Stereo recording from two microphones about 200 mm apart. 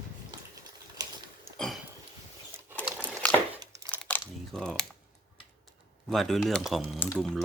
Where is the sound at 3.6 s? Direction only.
15° right (ahead or behind).